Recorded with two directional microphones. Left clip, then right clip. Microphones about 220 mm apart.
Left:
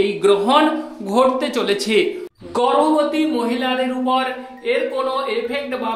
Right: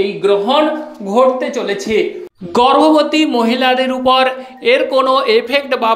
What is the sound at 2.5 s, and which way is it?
A man's voice, 35° right (ahead or behind).